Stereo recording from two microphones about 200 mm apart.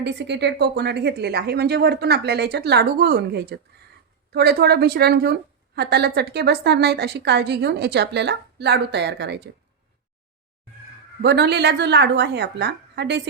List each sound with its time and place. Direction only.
0.0 s a woman's voice: 60° right (ahead or behind)
11.2 s a woman's voice: 55° right (ahead or behind)